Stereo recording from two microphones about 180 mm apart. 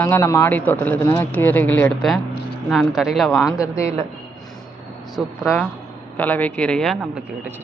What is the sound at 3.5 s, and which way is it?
Speech, 20° left (ahead or behind).